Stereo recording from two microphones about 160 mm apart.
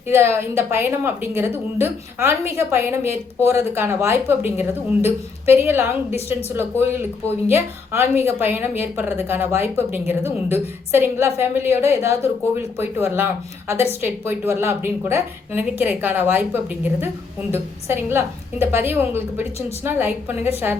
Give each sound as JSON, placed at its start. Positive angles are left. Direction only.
{"t": 0.1, "sound": "a woman's voice", "side_deg": -15}